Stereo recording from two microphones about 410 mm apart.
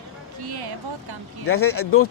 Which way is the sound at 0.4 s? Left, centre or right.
Right.